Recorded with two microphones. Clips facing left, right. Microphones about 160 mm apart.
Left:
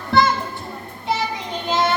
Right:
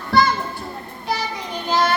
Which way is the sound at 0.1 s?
20° left (ahead or behind).